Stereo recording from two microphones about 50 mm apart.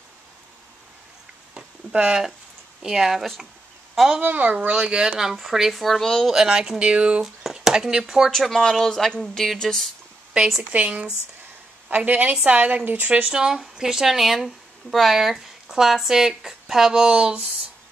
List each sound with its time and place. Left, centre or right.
1.9 s a woman's voice: centre
4.2 s speech: right
4.7 s speech: centre
5.1 s speech: centre
6.3 s a woman's voice: centre
8.3 s speech: centre
10.3 s a woman's voice: centre
10.7 s speech: right
12.8 s speech: right
13.3 s a woman's voice: centre